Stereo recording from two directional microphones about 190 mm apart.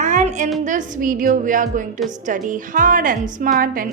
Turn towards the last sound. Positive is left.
turn(degrees=-45)  # may be behind; listen again after turning